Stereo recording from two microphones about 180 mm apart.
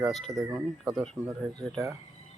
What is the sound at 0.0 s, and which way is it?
Chicken, centre (ahead or behind).